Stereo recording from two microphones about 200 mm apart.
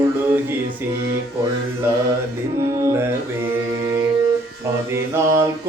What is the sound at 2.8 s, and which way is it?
Music, 15° right (ahead or behind).